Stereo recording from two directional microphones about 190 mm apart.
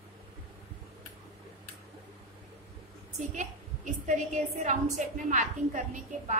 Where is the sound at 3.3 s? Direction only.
40° right (ahead or behind).